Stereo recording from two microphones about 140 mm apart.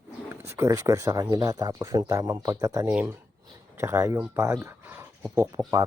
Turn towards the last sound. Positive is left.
turn(degrees=-30)  # may be behind; listen again after turning